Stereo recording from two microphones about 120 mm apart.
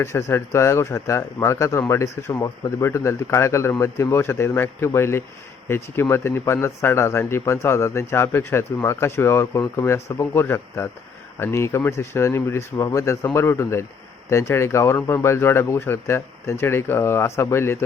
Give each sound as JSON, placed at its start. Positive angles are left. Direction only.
{"t": 0.0, "sound": "a man's voice", "side_deg": 25}